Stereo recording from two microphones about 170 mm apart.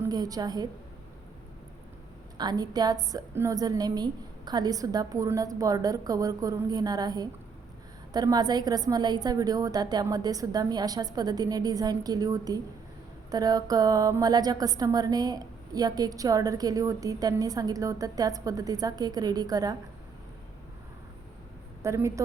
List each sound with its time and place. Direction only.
0.0 s a woman's voice: 20° right (ahead or behind)
2.4 s a woman's voice: 25° right (ahead or behind)
21.8 s a woman's voice: 15° right (ahead or behind)